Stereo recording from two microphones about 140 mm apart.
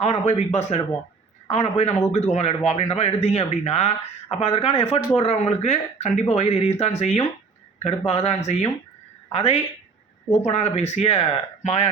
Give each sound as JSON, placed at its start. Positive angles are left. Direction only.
{"t": 0.0, "sound": "speech", "side_deg": 50}